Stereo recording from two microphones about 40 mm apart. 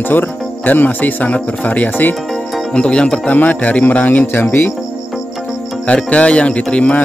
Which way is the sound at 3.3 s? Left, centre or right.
Left.